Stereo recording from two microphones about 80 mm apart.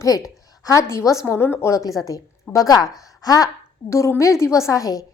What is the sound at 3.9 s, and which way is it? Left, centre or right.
A woman's voice, left.